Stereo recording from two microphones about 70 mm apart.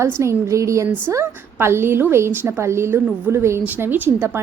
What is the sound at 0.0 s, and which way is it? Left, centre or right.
Speech, right.